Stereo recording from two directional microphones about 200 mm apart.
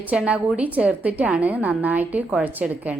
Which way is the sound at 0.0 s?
5° right (ahead or behind).